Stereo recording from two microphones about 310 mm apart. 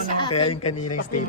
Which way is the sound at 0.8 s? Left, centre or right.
Left.